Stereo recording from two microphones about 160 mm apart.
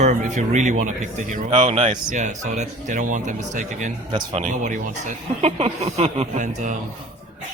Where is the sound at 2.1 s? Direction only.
50° right (ahead or behind).